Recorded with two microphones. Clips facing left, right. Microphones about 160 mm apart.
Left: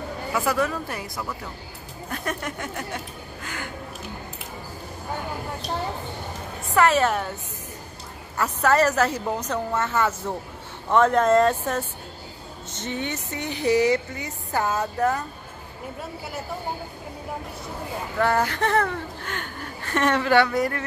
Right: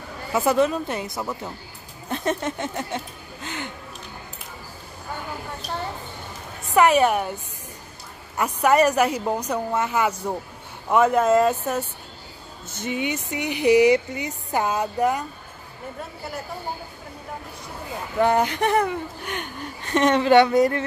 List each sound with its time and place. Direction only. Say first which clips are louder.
0.3 s speech: right 5 dB; 20° right (ahead or behind)
3.4 s music: right 3 dB; 25° right (ahead or behind)
6.7 s speech: right 3 dB; 15° right (ahead or behind)
8.4 s speech: right 2 dB; 15° right (ahead or behind)
18.1 s speech: right 3 dB; 20° right (ahead or behind)